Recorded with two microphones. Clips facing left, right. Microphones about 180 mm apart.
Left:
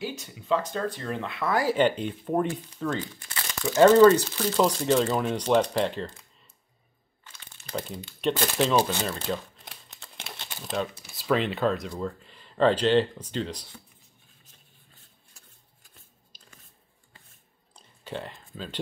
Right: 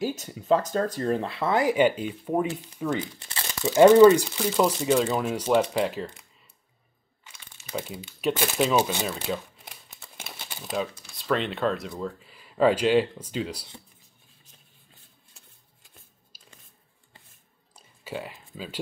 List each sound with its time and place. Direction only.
0.2 s speech: 45° right (ahead or behind); by 2.9 s 5° right (ahead or behind)
2.9 s speech: 25° right (ahead or behind)
3.8 s speech: 10° right (ahead or behind)
7.2 s crumpling: 5° right (ahead or behind)
11.1 s speech: 5° left (ahead or behind)
16.3 s a sound: 5° right (ahead or behind)
17.7 s a sound: 5° right (ahead or behind)